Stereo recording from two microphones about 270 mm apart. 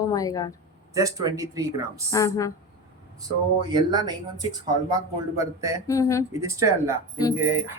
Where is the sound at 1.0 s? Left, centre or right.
Centre.